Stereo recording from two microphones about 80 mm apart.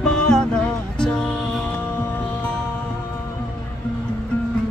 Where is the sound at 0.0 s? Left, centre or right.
Centre.